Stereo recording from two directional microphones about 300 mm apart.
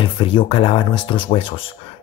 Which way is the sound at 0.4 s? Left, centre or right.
Centre.